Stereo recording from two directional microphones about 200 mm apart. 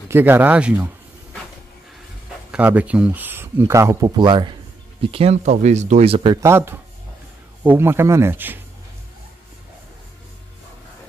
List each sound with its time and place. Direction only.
0.1 s speech: 10° right (ahead or behind)
2.5 s speech: 5° right (ahead or behind)